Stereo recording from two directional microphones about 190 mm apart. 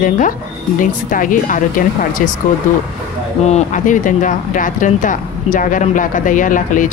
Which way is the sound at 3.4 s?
40° left (ahead or behind).